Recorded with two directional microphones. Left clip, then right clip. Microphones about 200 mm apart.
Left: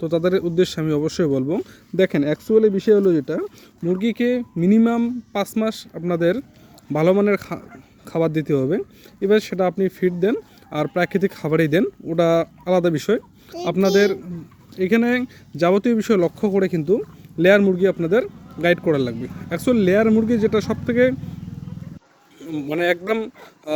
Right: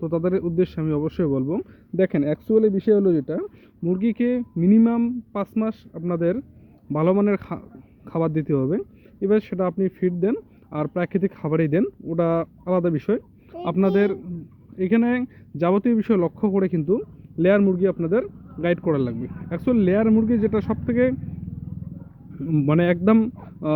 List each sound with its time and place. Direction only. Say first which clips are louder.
0.0 s speech: left 4 dB; 10° left (ahead or behind)
22.4 s speech: even; 15° left (ahead or behind)